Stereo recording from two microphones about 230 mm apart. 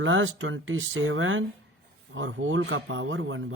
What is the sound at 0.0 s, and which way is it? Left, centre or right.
Speech, right.